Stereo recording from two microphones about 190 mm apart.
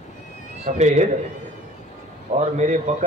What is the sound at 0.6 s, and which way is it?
Speech, 40° right (ahead or behind).